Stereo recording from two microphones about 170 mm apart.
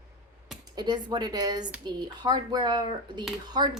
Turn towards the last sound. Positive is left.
turn(degrees=-25)  # may be behind; listen again after turning